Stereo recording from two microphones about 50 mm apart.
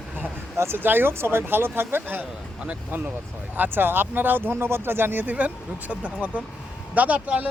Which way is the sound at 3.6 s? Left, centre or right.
Right.